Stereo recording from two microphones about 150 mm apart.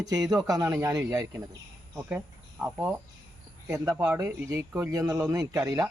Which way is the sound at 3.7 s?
20° right (ahead or behind).